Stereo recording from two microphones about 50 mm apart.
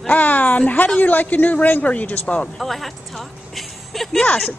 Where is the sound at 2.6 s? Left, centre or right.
Centre.